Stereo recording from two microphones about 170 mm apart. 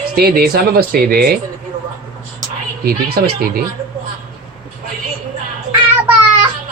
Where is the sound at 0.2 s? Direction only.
65° right (ahead or behind).